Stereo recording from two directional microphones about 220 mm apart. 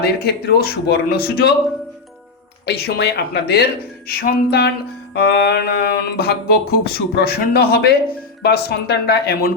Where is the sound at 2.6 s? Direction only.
45° left (ahead or behind).